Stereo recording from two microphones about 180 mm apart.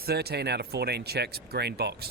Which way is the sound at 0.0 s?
60° right (ahead or behind).